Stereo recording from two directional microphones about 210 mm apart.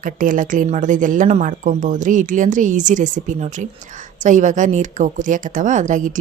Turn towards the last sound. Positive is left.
turn(degrees=-35)  # may be behind; listen again after turning